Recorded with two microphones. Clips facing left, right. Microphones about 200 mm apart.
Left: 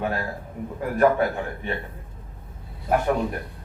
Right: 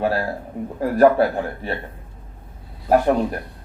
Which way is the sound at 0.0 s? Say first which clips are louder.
Right 6 dB; 35° right (ahead or behind).